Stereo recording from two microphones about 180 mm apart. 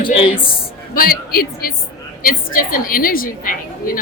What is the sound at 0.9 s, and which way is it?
A woman's voice, 50° left (ahead or behind).